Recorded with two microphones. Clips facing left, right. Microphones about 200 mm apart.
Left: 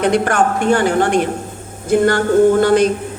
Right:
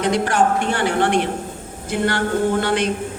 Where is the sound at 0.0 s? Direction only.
55° left (ahead or behind).